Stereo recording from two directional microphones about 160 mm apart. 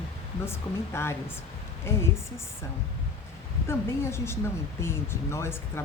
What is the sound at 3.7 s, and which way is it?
Speech, 15° left (ahead or behind).